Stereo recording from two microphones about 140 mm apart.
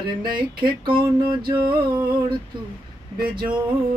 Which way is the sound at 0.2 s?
35° right (ahead or behind).